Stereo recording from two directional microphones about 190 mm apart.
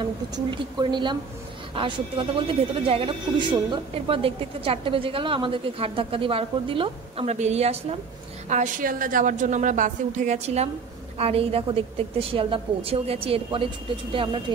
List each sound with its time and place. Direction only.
0.0 s a woman's voice: 25° right (ahead or behind)